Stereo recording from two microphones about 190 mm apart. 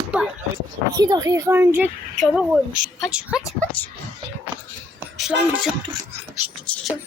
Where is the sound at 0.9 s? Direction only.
20° right (ahead or behind); by 3.4 s 5° right (ahead or behind).